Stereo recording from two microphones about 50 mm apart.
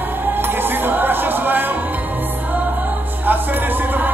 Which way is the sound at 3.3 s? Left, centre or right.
Right.